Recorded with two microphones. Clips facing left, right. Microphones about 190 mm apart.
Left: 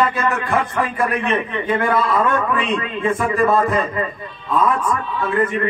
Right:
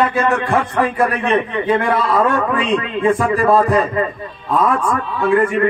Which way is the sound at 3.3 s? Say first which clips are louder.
Right 1 dB; 35° right (ahead or behind).